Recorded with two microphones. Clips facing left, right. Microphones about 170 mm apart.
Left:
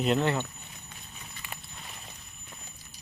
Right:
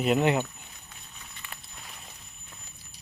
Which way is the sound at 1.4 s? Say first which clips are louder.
Left 2 dB; 10° left (ahead or behind).